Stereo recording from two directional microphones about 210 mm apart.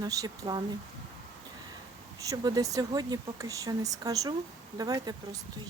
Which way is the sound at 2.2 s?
15° right (ahead or behind).